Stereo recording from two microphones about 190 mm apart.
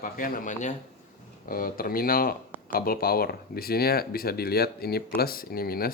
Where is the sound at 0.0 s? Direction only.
50° left (ahead or behind).